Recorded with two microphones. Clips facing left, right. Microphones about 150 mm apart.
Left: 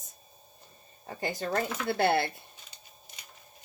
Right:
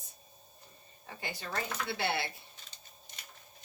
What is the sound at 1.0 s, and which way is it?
Speech, 40° left (ahead or behind).